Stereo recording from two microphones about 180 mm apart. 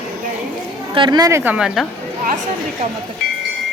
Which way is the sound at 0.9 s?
25° right (ahead or behind).